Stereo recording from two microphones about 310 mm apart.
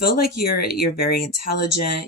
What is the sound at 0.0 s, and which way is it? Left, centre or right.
Speech, left.